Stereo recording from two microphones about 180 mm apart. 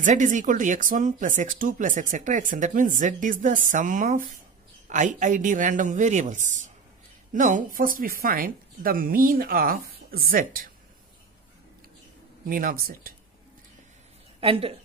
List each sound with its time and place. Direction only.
0.0 s speech: 45° right (ahead or behind)
12.4 s speech: 50° right (ahead or behind)
14.4 s a woman's voice: 30° right (ahead or behind)